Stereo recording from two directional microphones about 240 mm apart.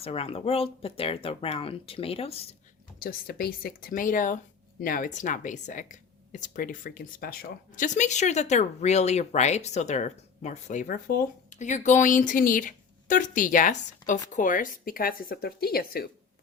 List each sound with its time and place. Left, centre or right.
0.0 s speech: left
3.0 s speech: left